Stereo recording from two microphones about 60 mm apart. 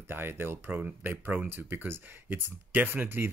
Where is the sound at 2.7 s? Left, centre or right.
Right.